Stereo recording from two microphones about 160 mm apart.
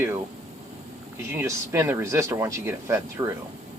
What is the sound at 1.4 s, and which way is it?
Speech, 15° right (ahead or behind).